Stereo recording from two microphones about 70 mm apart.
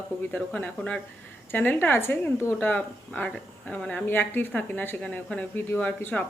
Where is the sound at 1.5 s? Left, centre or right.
Left.